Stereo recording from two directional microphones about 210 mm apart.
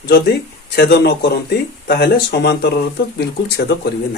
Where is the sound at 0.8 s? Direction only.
50° left (ahead or behind).